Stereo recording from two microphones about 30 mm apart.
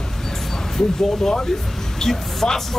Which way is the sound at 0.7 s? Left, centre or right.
Centre.